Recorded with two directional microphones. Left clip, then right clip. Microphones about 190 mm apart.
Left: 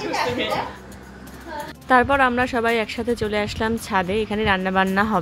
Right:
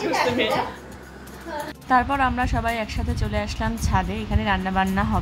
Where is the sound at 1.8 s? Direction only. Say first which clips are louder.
Left 4 dB; 25° left (ahead or behind).